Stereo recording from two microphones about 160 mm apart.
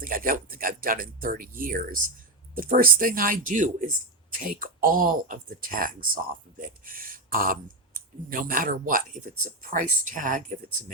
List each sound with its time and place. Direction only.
0.0 s speech: 65° right (ahead or behind)